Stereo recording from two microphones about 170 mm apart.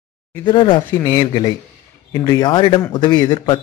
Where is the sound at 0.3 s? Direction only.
25° left (ahead or behind).